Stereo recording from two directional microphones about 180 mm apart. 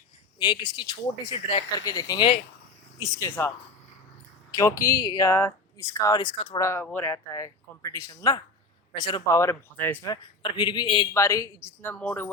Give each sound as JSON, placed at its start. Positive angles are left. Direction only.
{"t": 0.3, "sound": "a man's voice", "side_deg": 25}
{"t": 4.5, "sound": "speech", "side_deg": 15}
{"t": 6.8, "sound": "a man's voice", "side_deg": 10}
{"t": 11.1, "sound": "speech", "side_deg": 15}